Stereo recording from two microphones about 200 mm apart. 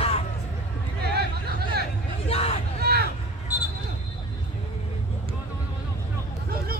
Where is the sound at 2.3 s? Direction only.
30° left (ahead or behind).